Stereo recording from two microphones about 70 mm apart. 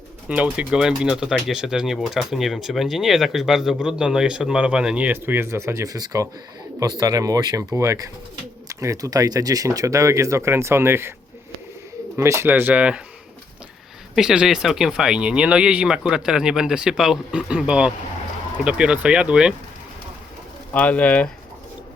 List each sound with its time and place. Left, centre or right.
0.3 s speech: centre
5.0 s speech: right
12.1 s speech: right; by 13.0 s centre
14.2 s speech: centre
20.7 s speech: left